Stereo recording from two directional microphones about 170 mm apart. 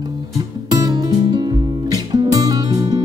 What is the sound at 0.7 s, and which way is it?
Music, 20° right (ahead or behind).